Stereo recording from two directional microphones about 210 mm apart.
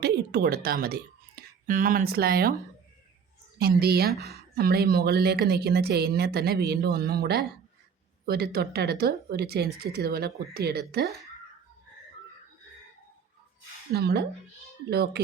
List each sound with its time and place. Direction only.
0.0 s speech: 50° right (ahead or behind)
3.6 s speech: 50° right (ahead or behind)
13.9 s speech: 50° right (ahead or behind)